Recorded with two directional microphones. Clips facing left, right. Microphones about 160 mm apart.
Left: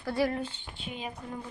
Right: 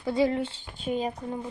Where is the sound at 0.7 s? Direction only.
40° right (ahead or behind).